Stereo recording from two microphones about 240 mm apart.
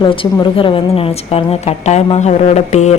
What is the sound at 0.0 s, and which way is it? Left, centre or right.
A woman's voice, left.